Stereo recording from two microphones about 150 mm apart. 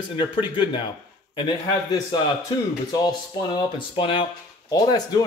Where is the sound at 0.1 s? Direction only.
35° left (ahead or behind).